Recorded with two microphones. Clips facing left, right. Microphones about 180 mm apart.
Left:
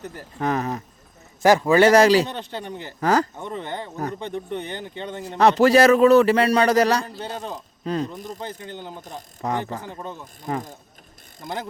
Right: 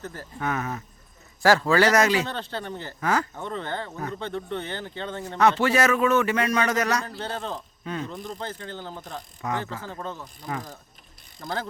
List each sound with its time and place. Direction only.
0.0 s speech: 15° left (ahead or behind)
0.3 s speech: 35° left (ahead or behind)
1.4 s speech: 15° left (ahead or behind)
1.9 s speech: 35° left (ahead or behind)
2.2 s speech: 15° left (ahead or behind)
3.0 s speech: 35° left (ahead or behind)
3.3 s speech: 15° left (ahead or behind)
5.4 s speech: 35° left (ahead or behind)
7.2 s speech: 15° left (ahead or behind)
7.9 s speech: 35° left (ahead or behind)
8.4 s speech: 15° left (ahead or behind)
9.4 s speech: 35° left (ahead or behind)
9.8 s speech: 15° left (ahead or behind)
11.3 s speech: 20° left (ahead or behind)